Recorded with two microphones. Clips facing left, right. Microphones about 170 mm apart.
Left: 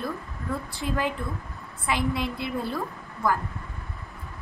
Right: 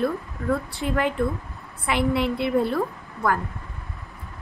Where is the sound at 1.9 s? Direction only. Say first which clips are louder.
Right 5 dB; 60° right (ahead or behind).